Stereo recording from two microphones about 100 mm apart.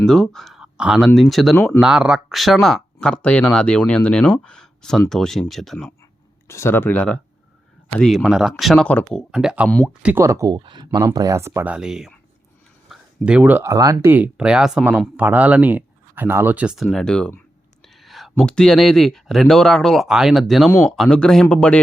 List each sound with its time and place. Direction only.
0.0 s speech: 5° left (ahead or behind)
0.6 s speech: 10° right (ahead or behind)
6.5 s speech: 25° left (ahead or behind); by 10.2 s 10° right (ahead or behind)
10.2 s speech: 30° right (ahead or behind)
10.5 s speech: 50° right (ahead or behind)
11.0 s speech: 35° right (ahead or behind)
11.6 s speech: 10° right (ahead or behind)
12.9 s a sound: 10° right (ahead or behind)
13.6 s speech: 35° right (ahead or behind)
14.1 s speech: 15° right (ahead or behind)
16.7 s speech: centre (ahead or behind)